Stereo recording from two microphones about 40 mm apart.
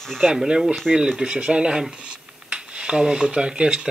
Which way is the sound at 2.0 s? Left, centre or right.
Right.